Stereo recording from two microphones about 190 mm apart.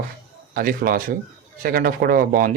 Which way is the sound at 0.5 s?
50° right (ahead or behind).